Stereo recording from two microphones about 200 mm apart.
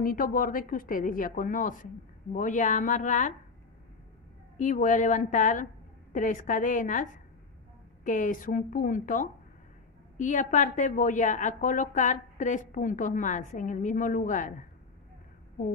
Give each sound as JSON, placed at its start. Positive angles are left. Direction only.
{"t": 0.0, "sound": "a woman's voice", "side_deg": 45}
{"t": 4.6, "sound": "a woman's voice", "side_deg": 40}